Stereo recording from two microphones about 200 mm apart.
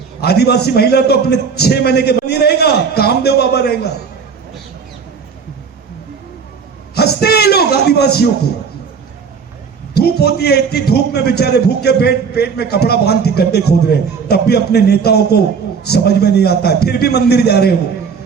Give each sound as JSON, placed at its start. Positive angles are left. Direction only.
{"t": 0.2, "sound": "a man's voice", "side_deg": 55}
{"t": 6.9, "sound": "a sound", "side_deg": 55}
{"t": 9.9, "sound": "a man's voice", "side_deg": 55}